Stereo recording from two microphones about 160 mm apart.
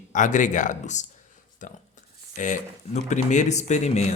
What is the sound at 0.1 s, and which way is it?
Speech, 50° left (ahead or behind).